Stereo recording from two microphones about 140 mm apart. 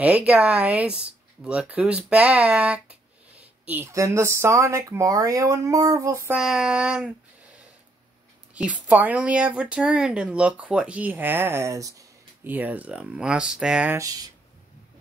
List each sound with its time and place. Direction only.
0.0 s speech: 10° right (ahead or behind)
6.3 s speech: 5° right (ahead or behind)
13.9 s speech: 25° right (ahead or behind)